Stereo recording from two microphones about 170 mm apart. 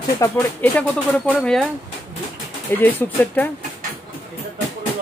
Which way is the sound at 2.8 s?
10° left (ahead or behind).